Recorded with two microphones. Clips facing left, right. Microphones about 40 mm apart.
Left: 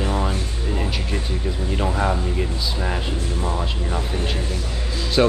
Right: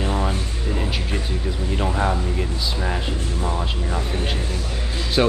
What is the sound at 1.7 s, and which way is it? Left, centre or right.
Speech, centre.